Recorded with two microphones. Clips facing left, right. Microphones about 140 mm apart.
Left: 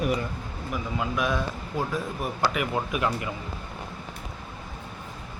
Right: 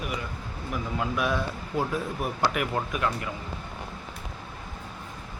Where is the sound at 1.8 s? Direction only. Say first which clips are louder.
Right 1 dB; 10° right (ahead or behind).